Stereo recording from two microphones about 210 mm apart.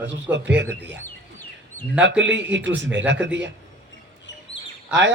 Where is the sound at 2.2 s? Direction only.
55° right (ahead or behind).